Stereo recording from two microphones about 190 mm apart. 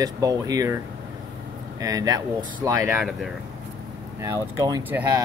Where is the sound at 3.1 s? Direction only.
Centre (ahead or behind).